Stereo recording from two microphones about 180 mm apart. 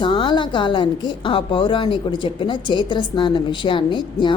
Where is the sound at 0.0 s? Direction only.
25° left (ahead or behind).